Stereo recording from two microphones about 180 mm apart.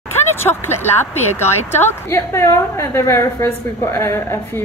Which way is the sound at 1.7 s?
10° left (ahead or behind).